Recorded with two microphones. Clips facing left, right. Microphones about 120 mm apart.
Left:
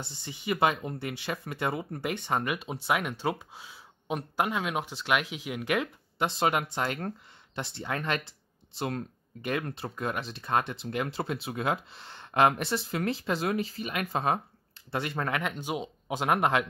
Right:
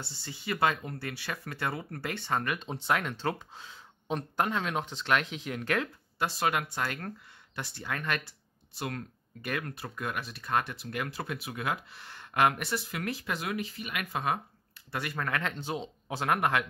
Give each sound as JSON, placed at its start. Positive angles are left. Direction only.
{"t": 0.0, "sound": "speech", "side_deg": 20}